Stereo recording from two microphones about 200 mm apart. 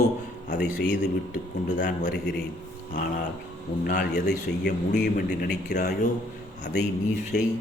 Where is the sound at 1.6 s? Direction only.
35° left (ahead or behind).